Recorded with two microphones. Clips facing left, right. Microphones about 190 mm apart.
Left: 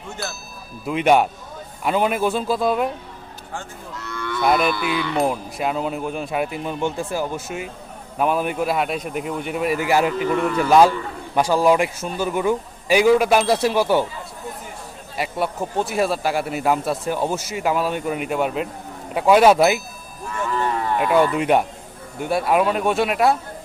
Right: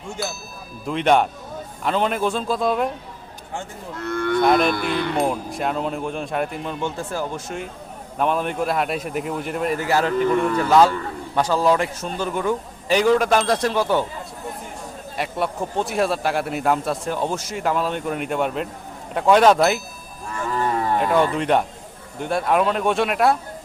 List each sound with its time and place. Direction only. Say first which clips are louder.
0.2 s a man's voice: right 2 dB; centre (ahead or behind)
3.9 s cattle: right 7 dB; 55° right (ahead or behind)
4.4 s a man's voice: even; 5° left (ahead or behind)
4.7 s a sound: right 1 dB; 50° right (ahead or behind)
5.1 s a man's voice: left 1 dB; centre (ahead or behind)
15.2 s a man's voice: left 1 dB; 5° left (ahead or behind)
20.6 s a sound: right 1 dB; 40° right (ahead or behind)
21.3 s a man's voice: left 2 dB; 10° left (ahead or behind)